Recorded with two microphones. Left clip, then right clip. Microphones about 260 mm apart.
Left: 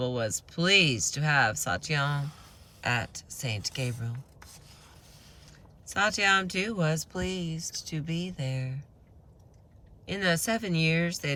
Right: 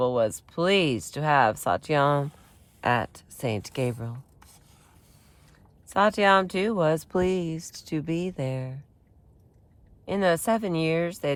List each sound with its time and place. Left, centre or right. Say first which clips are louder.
0.0 s speech: right 7 dB; centre
5.9 s speech: right 4 dB; centre
10.1 s speech: right 5 dB; centre